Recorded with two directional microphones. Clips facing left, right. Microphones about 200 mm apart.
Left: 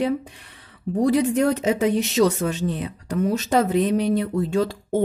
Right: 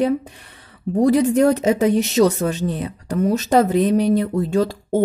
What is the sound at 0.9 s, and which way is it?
Speech, 45° right (ahead or behind).